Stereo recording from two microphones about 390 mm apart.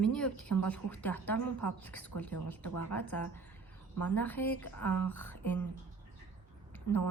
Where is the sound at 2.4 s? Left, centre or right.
Left.